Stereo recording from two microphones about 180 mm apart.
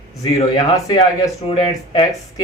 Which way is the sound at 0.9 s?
25° left (ahead or behind).